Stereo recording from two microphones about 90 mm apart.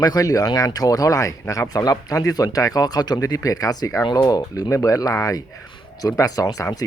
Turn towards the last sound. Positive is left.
turn(degrees=40)  # may be behind; listen again after turning